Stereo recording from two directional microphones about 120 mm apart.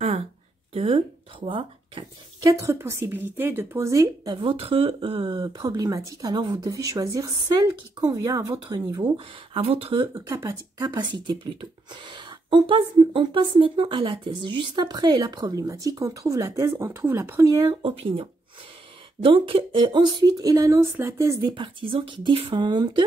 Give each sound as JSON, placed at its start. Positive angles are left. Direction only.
{"t": 0.7, "sound": "speech", "side_deg": -50}
{"t": 2.4, "sound": "speech", "side_deg": -25}
{"t": 5.4, "sound": "a woman's voice", "side_deg": -35}
{"t": 9.1, "sound": "speech", "side_deg": -50}
{"t": 10.1, "sound": "a woman's voice", "side_deg": -25}
{"t": 17.8, "sound": "a woman's voice", "side_deg": -50}
{"t": 22.6, "sound": "a woman's voice", "side_deg": -40}